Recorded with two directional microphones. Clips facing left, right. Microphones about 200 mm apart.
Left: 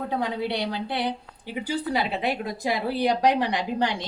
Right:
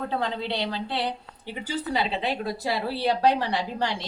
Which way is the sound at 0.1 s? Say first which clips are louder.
Left 2 dB; 10° left (ahead or behind).